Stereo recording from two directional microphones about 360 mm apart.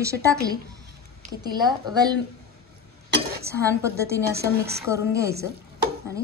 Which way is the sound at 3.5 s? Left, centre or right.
Centre.